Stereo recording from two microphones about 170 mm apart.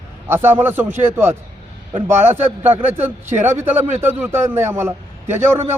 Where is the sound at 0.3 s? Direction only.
15° right (ahead or behind).